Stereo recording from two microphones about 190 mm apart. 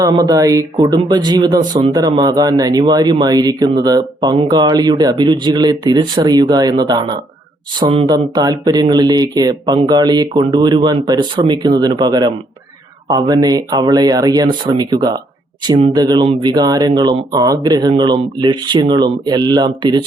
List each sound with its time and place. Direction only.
0.0 s speech: 20° right (ahead or behind)